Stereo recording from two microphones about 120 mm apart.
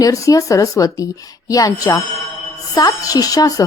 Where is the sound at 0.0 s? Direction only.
30° left (ahead or behind).